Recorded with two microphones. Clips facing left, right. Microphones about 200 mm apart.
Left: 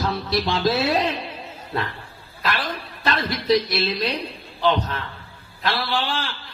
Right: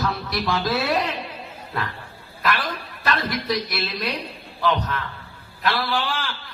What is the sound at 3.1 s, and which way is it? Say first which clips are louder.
A woman's voice: left 4 dB; 25° left (ahead or behind).